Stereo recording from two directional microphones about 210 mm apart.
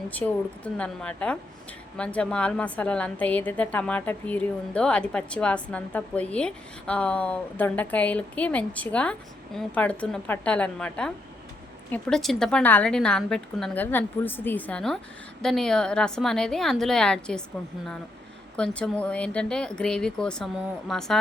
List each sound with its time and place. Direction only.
0.1 s a woman's voice: 5° left (ahead or behind)
18.5 s a woman's voice: 5° left (ahead or behind)